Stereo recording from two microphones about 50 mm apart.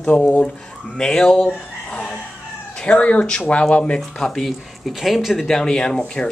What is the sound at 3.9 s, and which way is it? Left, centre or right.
Speech, centre.